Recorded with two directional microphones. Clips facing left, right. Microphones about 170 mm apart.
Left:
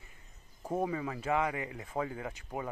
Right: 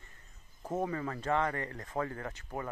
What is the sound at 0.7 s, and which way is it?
Speech, 10° left (ahead or behind).